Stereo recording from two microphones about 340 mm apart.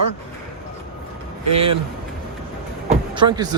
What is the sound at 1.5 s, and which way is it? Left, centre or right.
Speech, centre.